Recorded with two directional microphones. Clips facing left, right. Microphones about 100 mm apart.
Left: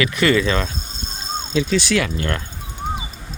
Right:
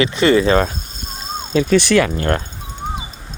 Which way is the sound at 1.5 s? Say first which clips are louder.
Right 6 dB; 50° right (ahead or behind).